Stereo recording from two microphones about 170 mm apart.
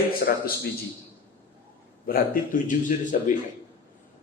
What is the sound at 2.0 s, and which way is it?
Speech, 55° left (ahead or behind).